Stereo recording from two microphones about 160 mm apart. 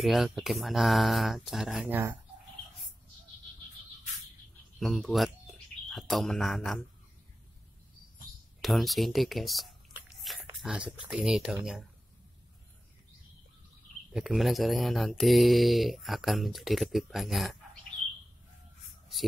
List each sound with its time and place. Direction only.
0.0 s speech: centre (ahead or behind)
4.7 s speech: centre (ahead or behind)
8.5 s speech: centre (ahead or behind)
14.1 s speech: centre (ahead or behind)